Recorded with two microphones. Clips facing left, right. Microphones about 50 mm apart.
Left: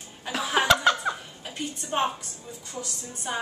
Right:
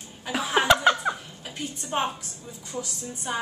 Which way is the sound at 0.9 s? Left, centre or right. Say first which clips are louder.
Right 1 dB; right.